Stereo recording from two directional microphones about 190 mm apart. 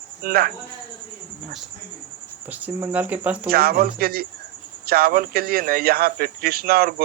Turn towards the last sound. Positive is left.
turn(degrees=-50)  # may be behind; listen again after turning